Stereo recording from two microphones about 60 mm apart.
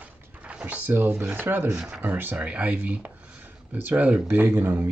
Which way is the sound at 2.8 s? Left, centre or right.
Right.